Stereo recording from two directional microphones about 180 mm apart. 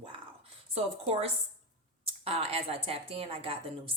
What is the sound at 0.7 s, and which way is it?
A woman's voice, 35° right (ahead or behind).